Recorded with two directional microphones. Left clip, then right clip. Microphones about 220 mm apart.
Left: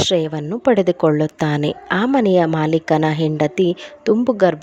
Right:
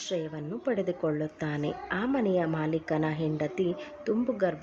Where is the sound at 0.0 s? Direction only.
45° left (ahead or behind).